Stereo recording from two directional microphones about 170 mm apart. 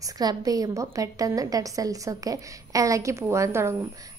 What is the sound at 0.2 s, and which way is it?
A woman's voice, 20° right (ahead or behind).